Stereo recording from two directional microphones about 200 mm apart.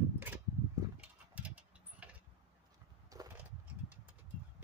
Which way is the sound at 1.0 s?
5° right (ahead or behind).